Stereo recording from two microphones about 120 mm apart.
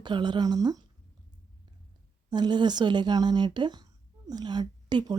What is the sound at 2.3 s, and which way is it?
Speech, 40° right (ahead or behind).